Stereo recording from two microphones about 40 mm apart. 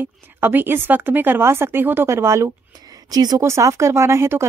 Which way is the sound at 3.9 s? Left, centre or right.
Right.